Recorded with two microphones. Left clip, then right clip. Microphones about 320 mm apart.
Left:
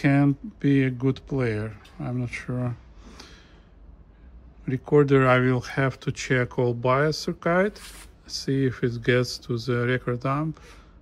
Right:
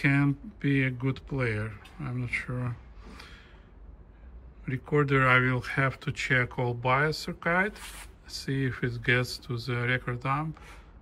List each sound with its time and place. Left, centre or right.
0.0 s speech: centre
4.6 s speech: centre